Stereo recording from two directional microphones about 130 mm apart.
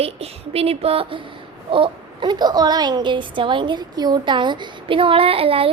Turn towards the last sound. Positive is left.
turn(degrees=-45)  # may be behind; listen again after turning